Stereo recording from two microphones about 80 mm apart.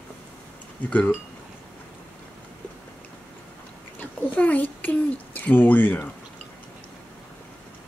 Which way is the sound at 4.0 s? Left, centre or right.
Centre.